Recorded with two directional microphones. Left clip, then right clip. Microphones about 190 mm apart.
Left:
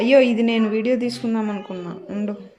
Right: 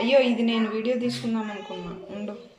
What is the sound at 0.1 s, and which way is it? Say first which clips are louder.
A woman's voice: left 5 dB; 55° left (ahead or behind).